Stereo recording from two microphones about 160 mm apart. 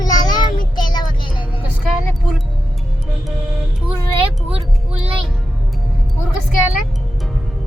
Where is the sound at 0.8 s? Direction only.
25° left (ahead or behind).